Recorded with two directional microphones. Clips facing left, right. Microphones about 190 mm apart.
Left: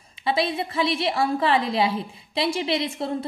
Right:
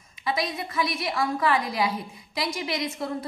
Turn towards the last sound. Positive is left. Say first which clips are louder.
# left 4 dB
turn(degrees=30)  # may be behind; listen again after turning